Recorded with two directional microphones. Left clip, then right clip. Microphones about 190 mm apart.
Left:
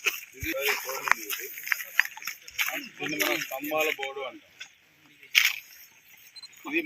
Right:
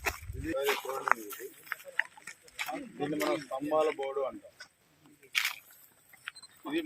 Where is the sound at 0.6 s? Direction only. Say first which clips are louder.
Left 3 dB; 15° left (ahead or behind).